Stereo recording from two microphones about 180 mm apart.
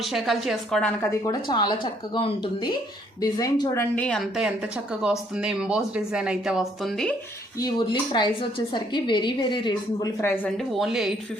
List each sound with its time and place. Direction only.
0.0 s speech: centre (ahead or behind)
1.2 s a woman's voice: 25° left (ahead or behind)
3.9 s speech: 5° left (ahead or behind)
7.6 s a woman's voice: 25° left (ahead or behind)
10.2 s speech: 10° left (ahead or behind)